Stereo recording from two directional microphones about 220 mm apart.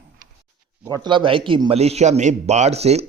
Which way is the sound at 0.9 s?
20° right (ahead or behind).